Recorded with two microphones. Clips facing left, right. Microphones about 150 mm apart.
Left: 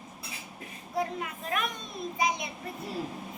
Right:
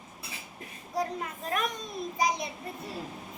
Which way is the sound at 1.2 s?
35° right (ahead or behind).